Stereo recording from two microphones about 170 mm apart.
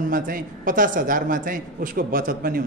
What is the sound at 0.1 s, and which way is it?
Speech, 55° right (ahead or behind).